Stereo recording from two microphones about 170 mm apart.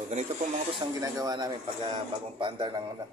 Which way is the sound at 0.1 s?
45° right (ahead or behind).